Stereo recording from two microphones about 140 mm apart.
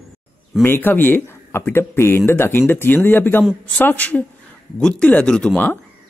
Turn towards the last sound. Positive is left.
turn(degrees=10)  # may be behind; listen again after turning